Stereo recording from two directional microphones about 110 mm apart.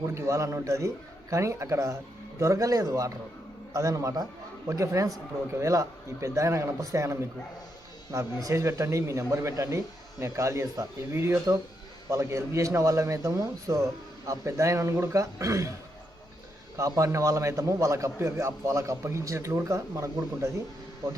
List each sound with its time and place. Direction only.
0.0 s a man's voice: 25° right (ahead or behind)
16.7 s a man's voice: 30° right (ahead or behind)